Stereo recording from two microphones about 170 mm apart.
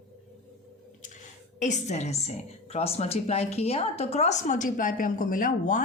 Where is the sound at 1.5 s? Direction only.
45° left (ahead or behind).